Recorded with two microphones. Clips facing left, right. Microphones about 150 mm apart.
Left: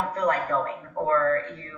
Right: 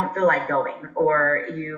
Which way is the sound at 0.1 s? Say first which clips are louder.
Right 6 dB; 45° right (ahead or behind).